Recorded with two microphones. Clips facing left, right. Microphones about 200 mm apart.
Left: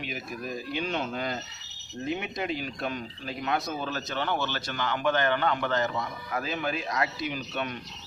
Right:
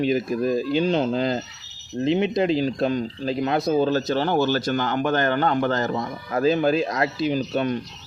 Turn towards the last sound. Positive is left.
turn(degrees=-35)  # may be behind; listen again after turning